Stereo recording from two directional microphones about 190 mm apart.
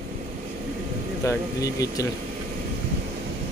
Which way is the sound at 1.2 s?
20° left (ahead or behind).